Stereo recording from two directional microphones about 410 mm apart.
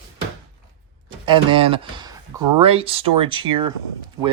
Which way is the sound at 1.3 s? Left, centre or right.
Centre.